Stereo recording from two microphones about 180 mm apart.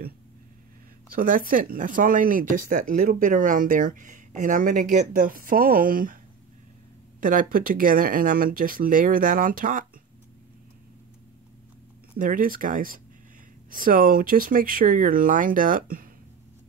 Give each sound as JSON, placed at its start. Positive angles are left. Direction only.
{"t": 1.1, "sound": "speech", "side_deg": -50}
{"t": 7.2, "sound": "speech", "side_deg": -50}
{"t": 12.2, "sound": "speech", "side_deg": -50}